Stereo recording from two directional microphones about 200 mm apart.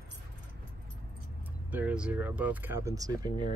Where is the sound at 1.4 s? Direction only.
10° right (ahead or behind).